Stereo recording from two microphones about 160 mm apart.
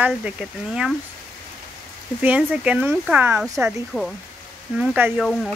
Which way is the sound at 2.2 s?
10° right (ahead or behind).